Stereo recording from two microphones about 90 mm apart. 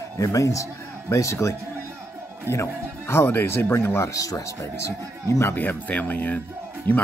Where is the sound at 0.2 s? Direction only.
35° left (ahead or behind).